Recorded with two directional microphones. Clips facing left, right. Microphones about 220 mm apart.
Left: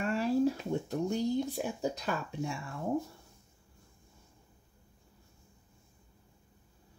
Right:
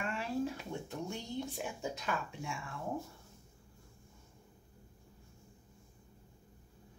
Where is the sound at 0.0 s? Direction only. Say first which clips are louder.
Left 8 dB; 40° left (ahead or behind).